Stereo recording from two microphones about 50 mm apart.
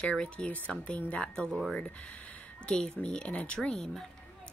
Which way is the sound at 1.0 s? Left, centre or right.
Left.